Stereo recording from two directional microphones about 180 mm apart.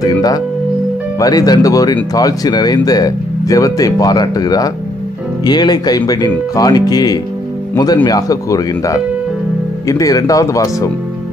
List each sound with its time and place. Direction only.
0.0 s music: 20° left (ahead or behind)
1.2 s speech: 20° left (ahead or behind)